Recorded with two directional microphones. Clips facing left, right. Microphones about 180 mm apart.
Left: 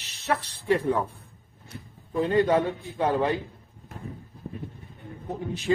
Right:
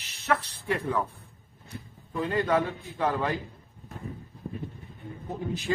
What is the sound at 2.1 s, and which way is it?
A man's voice, 25° left (ahead or behind).